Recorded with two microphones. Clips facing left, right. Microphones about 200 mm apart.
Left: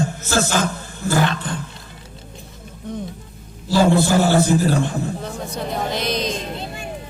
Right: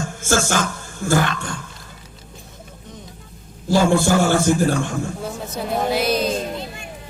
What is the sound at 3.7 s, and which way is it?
Speech, 50° right (ahead or behind).